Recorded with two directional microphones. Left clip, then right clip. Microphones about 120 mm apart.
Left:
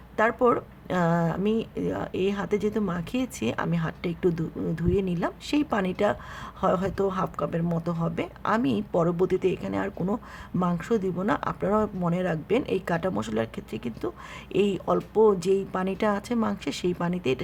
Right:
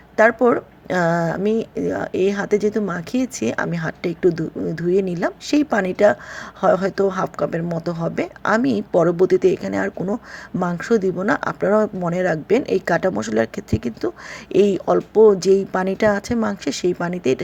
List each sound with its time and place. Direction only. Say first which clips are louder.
0.2 s speech: right 7 dB; 25° right (ahead or behind)